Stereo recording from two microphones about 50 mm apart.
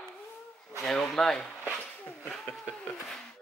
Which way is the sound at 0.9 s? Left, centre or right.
Centre.